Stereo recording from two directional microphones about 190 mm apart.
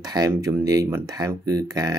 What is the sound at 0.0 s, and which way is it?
Speech, 20° right (ahead or behind).